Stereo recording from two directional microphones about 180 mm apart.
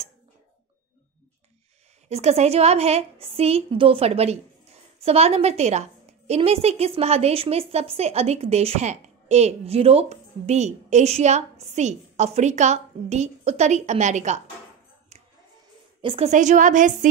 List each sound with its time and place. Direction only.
2.0 s a woman's voice: 35° right (ahead or behind)
16.0 s a woman's voice: 30° right (ahead or behind)